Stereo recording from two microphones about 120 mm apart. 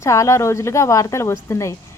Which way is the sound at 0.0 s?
25° left (ahead or behind).